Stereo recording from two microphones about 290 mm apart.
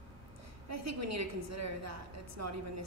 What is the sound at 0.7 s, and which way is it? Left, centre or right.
A woman's voice, right.